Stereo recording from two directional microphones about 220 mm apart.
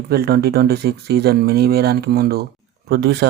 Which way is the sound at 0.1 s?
45° right (ahead or behind).